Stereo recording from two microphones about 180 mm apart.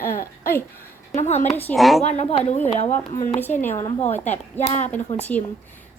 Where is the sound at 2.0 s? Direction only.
35° left (ahead or behind).